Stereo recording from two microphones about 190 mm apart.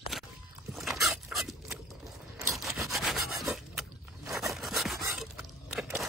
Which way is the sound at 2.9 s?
Centre (ahead or behind).